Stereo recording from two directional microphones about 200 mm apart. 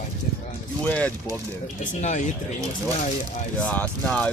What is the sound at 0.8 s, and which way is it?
Speech, 5° left (ahead or behind).